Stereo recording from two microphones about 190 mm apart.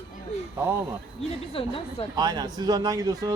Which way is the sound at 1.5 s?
30° left (ahead or behind).